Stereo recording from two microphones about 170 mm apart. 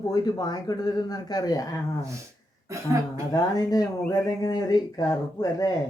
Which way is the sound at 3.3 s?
20° left (ahead or behind).